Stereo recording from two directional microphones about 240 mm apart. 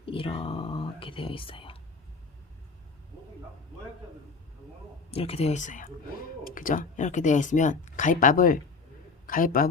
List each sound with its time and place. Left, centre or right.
0.0 s speech: left
5.1 s a man's voice: left